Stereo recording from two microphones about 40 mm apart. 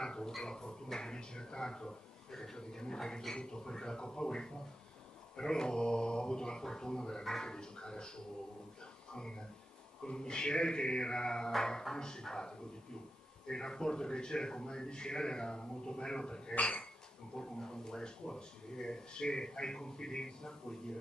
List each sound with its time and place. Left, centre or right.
0.0 s a sound: centre
0.4 s a man's voice: centre
10.0 s a man's voice: left